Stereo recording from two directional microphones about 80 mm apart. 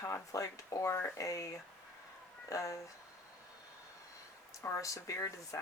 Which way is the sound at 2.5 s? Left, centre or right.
Left.